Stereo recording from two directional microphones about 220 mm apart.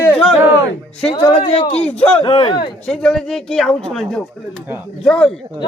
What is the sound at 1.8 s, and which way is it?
Speech, 5° left (ahead or behind).